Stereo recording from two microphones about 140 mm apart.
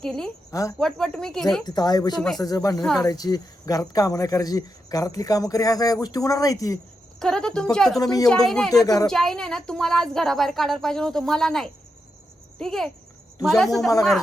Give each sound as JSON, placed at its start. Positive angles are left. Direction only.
{"t": 0.0, "sound": "speech", "side_deg": 5}
{"t": 1.6, "sound": "speech", "side_deg": 30}
{"t": 7.2, "sound": "speech", "side_deg": 5}
{"t": 7.9, "sound": "speech", "side_deg": 25}
{"t": 8.4, "sound": "speech", "side_deg": 0}
{"t": 8.7, "sound": "speech", "side_deg": 25}
{"t": 9.0, "sound": "speech", "side_deg": 5}